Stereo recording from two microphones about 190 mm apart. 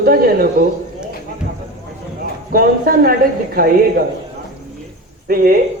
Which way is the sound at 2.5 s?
50° right (ahead or behind).